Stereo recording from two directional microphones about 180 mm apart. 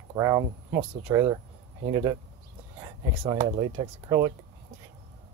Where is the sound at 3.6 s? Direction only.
35° right (ahead or behind).